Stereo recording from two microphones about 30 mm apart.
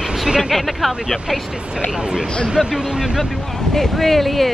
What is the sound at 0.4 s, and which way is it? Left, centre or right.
Speech, centre.